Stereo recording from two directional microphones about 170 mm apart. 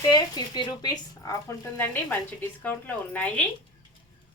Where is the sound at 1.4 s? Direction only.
10° left (ahead or behind).